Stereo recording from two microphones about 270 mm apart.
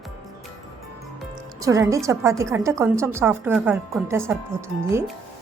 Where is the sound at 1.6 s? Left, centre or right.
Centre.